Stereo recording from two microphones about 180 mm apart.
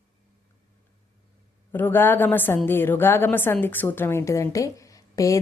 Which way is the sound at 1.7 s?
10° left (ahead or behind).